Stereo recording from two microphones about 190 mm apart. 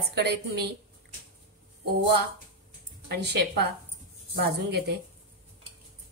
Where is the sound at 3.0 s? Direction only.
60° right (ahead or behind).